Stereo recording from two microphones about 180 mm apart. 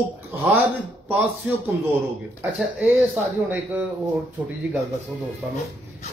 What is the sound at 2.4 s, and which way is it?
Speech, 10° right (ahead or behind).